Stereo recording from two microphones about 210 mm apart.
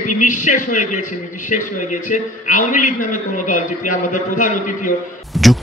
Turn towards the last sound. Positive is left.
turn(degrees=0)  # may be behind; listen again after turning